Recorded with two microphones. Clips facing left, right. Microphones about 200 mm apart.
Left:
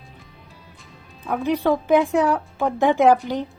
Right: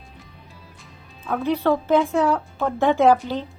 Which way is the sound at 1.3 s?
15° left (ahead or behind).